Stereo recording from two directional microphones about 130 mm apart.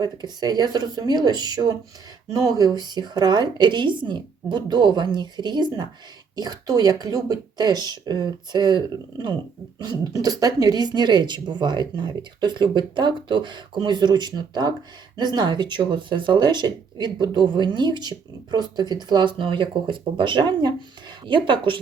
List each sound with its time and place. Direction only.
0.0 s speech: 30° right (ahead or behind)